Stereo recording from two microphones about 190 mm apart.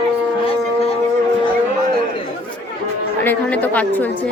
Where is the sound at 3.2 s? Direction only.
10° left (ahead or behind).